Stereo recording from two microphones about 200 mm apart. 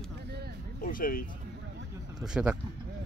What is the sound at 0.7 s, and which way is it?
Speech, 45° left (ahead or behind).